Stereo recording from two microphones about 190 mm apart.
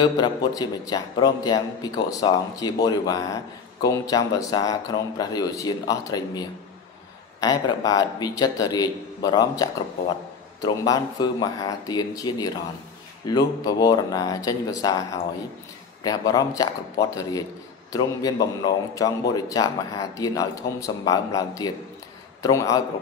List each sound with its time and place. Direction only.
0.0 s a man's voice: 20° left (ahead or behind)